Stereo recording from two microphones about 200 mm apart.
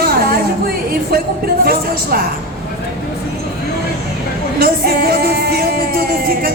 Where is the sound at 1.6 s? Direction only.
50° right (ahead or behind).